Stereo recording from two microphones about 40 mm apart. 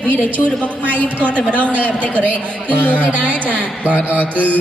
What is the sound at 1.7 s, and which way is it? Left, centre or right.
Speech, right.